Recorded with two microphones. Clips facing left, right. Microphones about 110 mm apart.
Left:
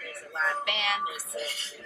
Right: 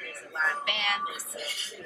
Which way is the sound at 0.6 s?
Centre (ahead or behind).